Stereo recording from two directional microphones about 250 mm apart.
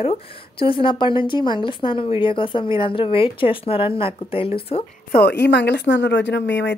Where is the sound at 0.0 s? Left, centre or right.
Left.